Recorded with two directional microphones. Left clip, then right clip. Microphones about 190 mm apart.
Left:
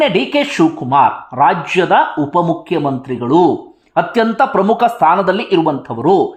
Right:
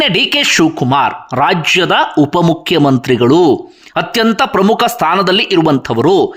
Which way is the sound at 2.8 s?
40° right (ahead or behind).